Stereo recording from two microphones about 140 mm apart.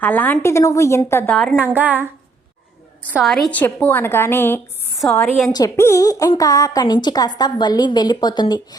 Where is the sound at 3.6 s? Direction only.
15° left (ahead or behind).